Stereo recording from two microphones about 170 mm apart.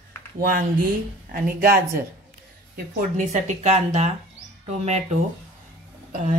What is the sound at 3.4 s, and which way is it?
Speech, 40° right (ahead or behind).